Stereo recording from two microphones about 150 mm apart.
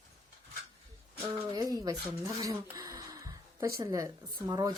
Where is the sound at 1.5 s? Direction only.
25° right (ahead or behind).